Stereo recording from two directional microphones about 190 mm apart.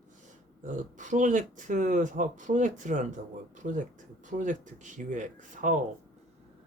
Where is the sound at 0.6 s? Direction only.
40° right (ahead or behind).